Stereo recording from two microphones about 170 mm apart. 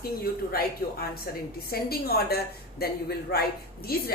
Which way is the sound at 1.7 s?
65° left (ahead or behind).